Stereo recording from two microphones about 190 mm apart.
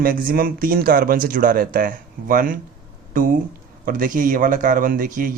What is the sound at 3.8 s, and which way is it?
Speech, 45° right (ahead or behind).